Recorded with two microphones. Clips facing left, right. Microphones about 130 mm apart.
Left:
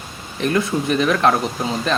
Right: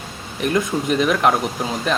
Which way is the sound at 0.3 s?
15° right (ahead or behind).